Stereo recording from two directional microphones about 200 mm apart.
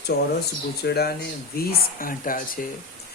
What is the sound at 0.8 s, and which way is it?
Speech, 55° left (ahead or behind).